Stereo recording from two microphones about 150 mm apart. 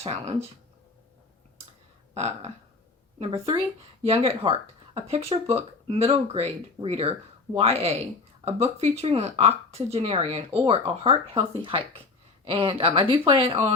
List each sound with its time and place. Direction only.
0.0 s speech: 45° right (ahead or behind)
2.1 s speech: 45° right (ahead or behind)